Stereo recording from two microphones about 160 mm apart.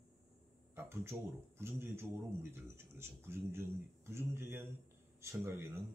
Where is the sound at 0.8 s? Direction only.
15° right (ahead or behind).